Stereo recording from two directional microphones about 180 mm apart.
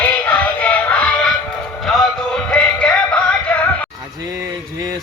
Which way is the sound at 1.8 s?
Centre (ahead or behind).